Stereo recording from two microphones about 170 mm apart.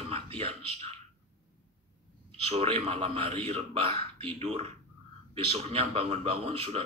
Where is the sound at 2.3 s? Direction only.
35° right (ahead or behind).